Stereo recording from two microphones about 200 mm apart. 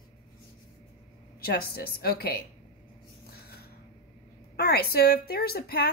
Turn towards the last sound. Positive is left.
turn(degrees=50)  # may be behind; listen again after turning